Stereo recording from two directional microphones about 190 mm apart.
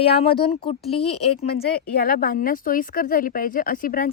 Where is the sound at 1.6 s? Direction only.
50° left (ahead or behind).